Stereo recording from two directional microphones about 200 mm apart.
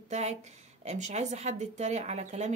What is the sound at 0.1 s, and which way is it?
Speech, 35° right (ahead or behind).